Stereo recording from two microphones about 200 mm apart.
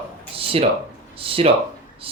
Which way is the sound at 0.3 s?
30° right (ahead or behind).